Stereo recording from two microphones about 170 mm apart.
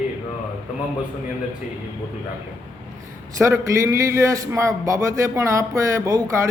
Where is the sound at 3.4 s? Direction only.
15° right (ahead or behind).